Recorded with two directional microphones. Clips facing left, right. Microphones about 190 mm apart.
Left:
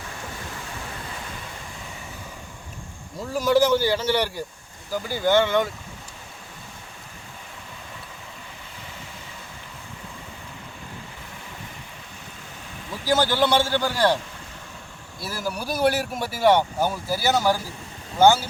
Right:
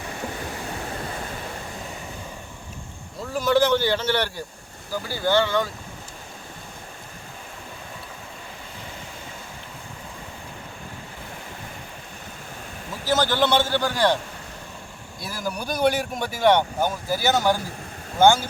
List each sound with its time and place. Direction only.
3.2 s speech: 10° left (ahead or behind)
13.1 s speech: 10° left (ahead or behind)
15.2 s speech: 5° left (ahead or behind)